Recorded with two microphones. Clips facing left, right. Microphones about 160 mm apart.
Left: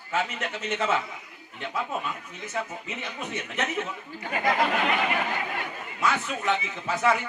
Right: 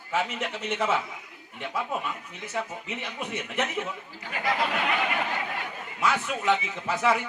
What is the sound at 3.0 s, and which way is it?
Speech, 10° right (ahead or behind).